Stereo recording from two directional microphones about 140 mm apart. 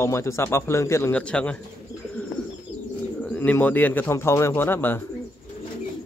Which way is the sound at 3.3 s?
10° left (ahead or behind).